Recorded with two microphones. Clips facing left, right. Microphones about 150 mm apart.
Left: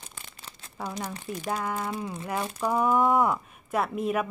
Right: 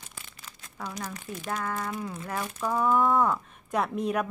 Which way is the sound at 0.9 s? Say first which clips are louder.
Left 3 dB; 30° left (ahead or behind).